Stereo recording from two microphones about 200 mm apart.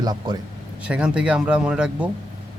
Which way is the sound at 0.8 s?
5° right (ahead or behind).